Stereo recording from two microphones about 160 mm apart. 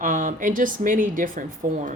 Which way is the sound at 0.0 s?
55° right (ahead or behind).